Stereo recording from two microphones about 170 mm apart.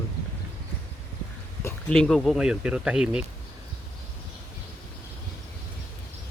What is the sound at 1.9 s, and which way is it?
Speech, centre (ahead or behind).